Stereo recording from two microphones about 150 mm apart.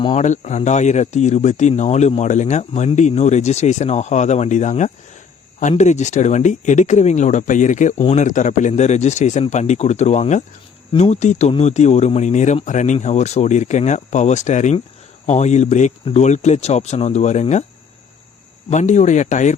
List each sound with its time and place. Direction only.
0.0 s speech: 45° left (ahead or behind)
18.7 s speech: 50° left (ahead or behind)